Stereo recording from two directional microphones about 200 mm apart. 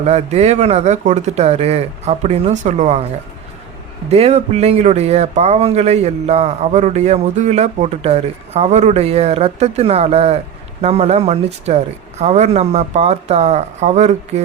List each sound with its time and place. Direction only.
0.0 s speech: 35° right (ahead or behind)
4.1 s speech: 30° right (ahead or behind)